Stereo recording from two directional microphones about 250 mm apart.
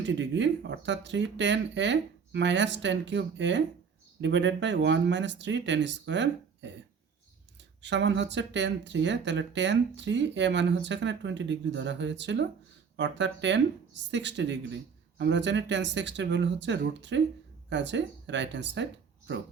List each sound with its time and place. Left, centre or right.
0.0 s speech: right
7.8 s speech: right